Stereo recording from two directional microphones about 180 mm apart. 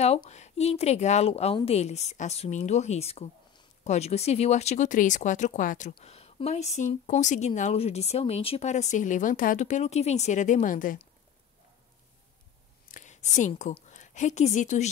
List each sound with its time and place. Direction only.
0.0 s a woman's voice: 35° left (ahead or behind)
5.9 s a woman's voice: 35° left (ahead or behind)
12.8 s a woman's voice: 45° left (ahead or behind)